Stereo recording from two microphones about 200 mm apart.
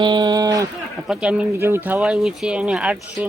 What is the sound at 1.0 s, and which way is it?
Speech, 5° right (ahead or behind).